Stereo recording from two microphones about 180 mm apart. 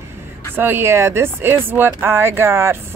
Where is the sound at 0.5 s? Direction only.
10° right (ahead or behind).